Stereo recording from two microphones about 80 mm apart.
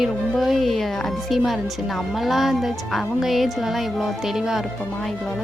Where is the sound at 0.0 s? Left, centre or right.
Centre.